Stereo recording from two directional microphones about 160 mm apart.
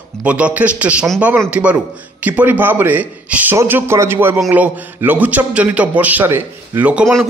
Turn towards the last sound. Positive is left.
turn(degrees=0)  # may be behind; listen again after turning